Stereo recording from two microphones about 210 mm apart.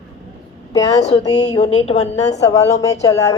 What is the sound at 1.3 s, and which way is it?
A woman's voice, 30° left (ahead or behind).